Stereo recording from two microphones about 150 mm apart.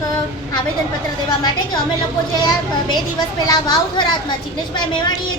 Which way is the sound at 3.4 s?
25° left (ahead or behind).